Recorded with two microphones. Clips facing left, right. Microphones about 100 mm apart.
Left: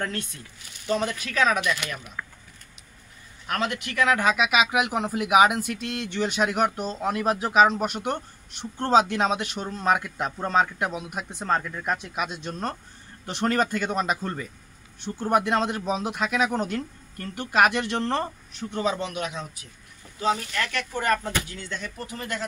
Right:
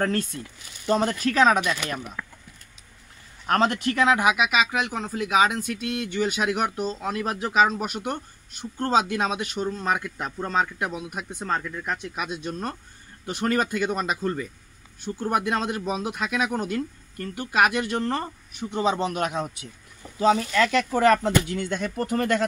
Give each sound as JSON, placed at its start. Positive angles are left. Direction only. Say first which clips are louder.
{"t": 0.0, "sound": "speech", "louder": "right 6 dB", "side_deg": -40}
{"t": 3.4, "sound": "speech", "louder": "right 6 dB", "side_deg": -35}
{"t": 4.4, "sound": "speech", "louder": "left 1 dB", "side_deg": 5}
{"t": 18.9, "sound": "speech", "louder": "right 3 dB", "side_deg": -30}
{"t": 19.1, "sound": "speech", "louder": "right 5 dB", "side_deg": -50}
{"t": 21.0, "sound": "speech", "louder": "right 5 dB", "side_deg": -90}